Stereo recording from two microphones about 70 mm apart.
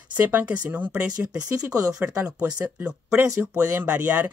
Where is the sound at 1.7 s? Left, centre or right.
Right.